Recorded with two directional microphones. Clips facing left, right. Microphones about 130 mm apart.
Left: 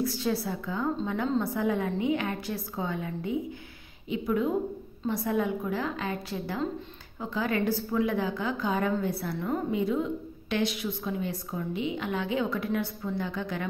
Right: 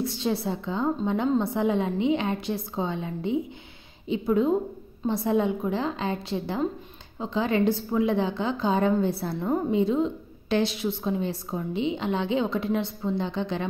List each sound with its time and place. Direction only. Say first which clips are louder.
0.0 s a woman's voice: right 2 dB; 25° right (ahead or behind)